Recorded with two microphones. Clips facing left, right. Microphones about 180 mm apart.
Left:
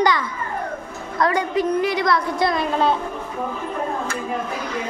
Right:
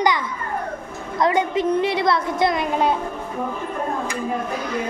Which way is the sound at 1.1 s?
20° right (ahead or behind).